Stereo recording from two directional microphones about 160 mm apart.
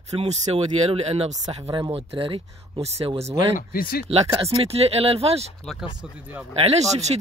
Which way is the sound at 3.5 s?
65° left (ahead or behind).